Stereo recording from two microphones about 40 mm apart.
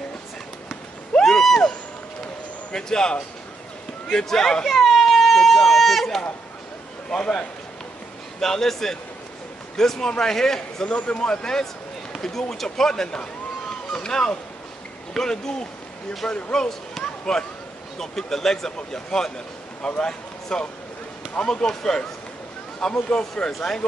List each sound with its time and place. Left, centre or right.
1.2 s a sound: centre
2.7 s a man's voice: centre
4.7 s baby cry: centre
7.1 s a man's voice: centre
10.9 s a man's voice: left
16.3 s a man's voice: left
17.0 s a sound: centre
17.9 s a man's voice: centre